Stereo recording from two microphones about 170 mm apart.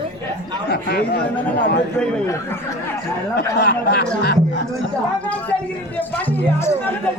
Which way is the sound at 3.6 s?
75° left (ahead or behind).